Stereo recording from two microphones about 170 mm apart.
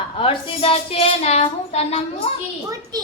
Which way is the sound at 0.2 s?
30° left (ahead or behind).